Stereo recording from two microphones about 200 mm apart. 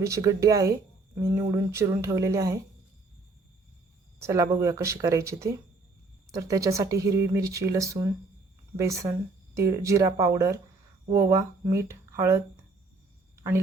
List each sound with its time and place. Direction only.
0.0 s speech: 15° right (ahead or behind)
4.2 s speech: 15° right (ahead or behind)